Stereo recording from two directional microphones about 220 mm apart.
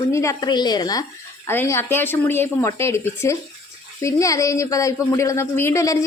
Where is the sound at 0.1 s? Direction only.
15° left (ahead or behind).